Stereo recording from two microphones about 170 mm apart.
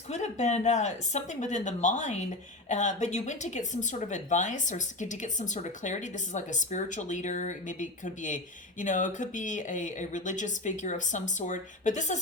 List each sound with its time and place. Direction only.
0.1 s speech: 40° left (ahead or behind)